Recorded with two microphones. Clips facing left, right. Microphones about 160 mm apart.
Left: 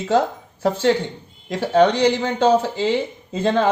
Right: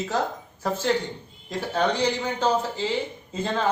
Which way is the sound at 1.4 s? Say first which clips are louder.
Left 9 dB; 75° left (ahead or behind).